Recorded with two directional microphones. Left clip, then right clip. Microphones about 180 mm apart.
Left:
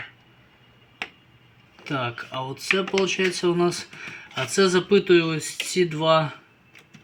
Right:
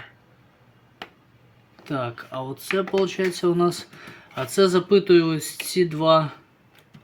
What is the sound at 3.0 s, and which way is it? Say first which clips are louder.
Speech: left 1 dB; 40° right (ahead or behind).